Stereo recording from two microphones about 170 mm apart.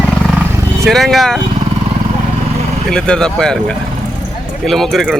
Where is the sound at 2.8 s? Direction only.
5° left (ahead or behind).